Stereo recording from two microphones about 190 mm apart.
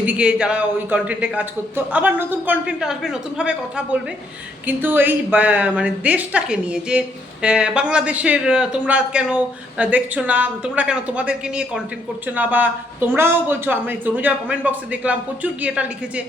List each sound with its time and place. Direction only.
0.0 s a man's voice: 5° right (ahead or behind)